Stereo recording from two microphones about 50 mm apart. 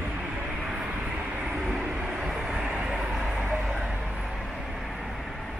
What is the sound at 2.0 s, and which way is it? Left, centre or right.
Vehicle, centre.